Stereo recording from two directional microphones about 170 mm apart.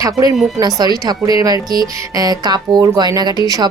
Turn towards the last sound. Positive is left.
turn(degrees=-25)  # may be behind; listen again after turning